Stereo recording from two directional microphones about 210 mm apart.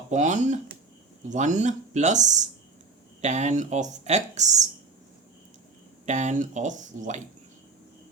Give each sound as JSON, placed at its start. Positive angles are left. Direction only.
{"t": 0.1, "sound": "speech", "side_deg": -35}
{"t": 6.1, "sound": "speech", "side_deg": -35}